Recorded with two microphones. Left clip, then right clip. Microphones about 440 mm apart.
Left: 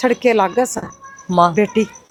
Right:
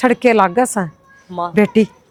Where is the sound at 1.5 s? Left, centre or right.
Right.